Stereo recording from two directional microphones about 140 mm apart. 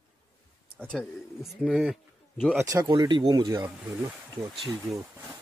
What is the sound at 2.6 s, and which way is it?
Speech, 25° right (ahead or behind).